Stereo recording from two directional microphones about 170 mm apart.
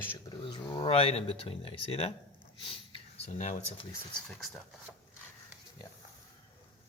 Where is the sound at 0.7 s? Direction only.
35° left (ahead or behind).